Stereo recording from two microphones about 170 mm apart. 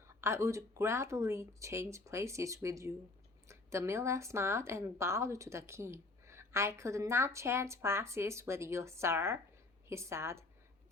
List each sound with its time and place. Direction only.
0.2 s a woman's voice: 15° right (ahead or behind)